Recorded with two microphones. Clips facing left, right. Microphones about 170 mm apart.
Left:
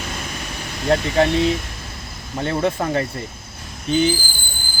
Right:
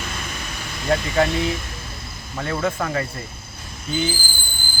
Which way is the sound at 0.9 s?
30° left (ahead or behind).